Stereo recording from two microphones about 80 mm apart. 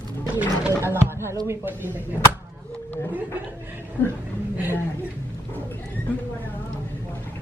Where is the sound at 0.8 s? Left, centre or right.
Right.